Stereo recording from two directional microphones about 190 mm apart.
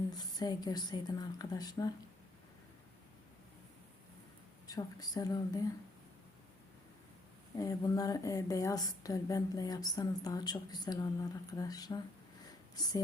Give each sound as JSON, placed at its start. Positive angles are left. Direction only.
{"t": 0.1, "sound": "a woman's voice", "side_deg": 20}
{"t": 4.7, "sound": "a woman's voice", "side_deg": 20}
{"t": 7.5, "sound": "a woman's voice", "side_deg": 20}